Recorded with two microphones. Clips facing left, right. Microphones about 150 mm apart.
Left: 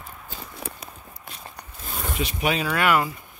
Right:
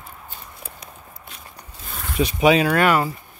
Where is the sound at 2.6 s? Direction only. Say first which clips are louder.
Right 4 dB; 40° right (ahead or behind).